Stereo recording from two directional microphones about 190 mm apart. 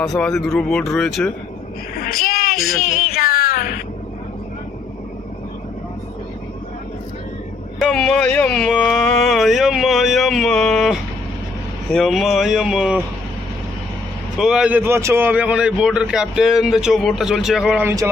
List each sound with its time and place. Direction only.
0.0 s a man's voice: centre (ahead or behind)
2.0 s a sound: 50° left (ahead or behind)
3.2 s music: 50° left (ahead or behind)
7.8 s a sound: centre (ahead or behind)
11.9 s a man's voice: centre (ahead or behind)
14.3 s a man's voice: 5° right (ahead or behind)